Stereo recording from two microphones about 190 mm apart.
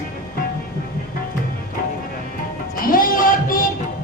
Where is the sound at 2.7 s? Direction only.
50° left (ahead or behind).